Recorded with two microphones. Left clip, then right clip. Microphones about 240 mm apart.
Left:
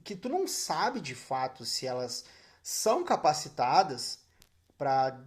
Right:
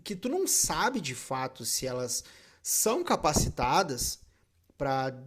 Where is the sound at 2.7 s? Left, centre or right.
Right.